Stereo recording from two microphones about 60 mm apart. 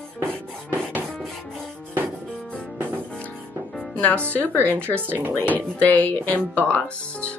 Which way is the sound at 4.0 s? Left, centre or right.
Left.